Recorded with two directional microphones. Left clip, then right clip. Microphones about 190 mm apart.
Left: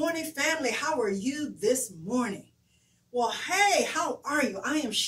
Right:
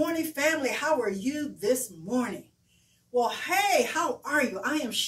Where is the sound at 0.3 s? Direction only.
15° left (ahead or behind).